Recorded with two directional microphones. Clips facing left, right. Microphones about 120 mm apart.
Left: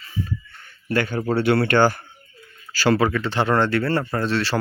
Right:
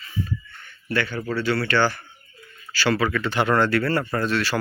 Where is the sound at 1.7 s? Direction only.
45° left (ahead or behind).